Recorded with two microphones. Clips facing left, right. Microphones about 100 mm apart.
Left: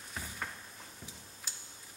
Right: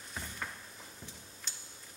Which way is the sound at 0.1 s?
5° left (ahead or behind).